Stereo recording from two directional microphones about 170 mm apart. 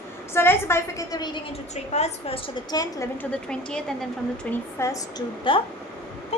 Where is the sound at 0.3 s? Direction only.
15° left (ahead or behind).